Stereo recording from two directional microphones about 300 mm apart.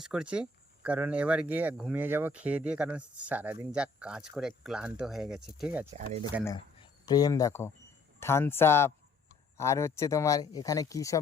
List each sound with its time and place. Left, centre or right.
0.0 s speech: centre
5.9 s speech: right
6.4 s speech: centre